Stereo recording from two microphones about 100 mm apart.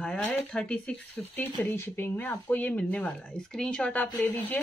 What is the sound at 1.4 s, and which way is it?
Speech, 20° left (ahead or behind).